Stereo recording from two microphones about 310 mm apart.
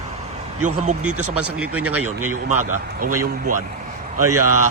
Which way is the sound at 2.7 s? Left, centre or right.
Right.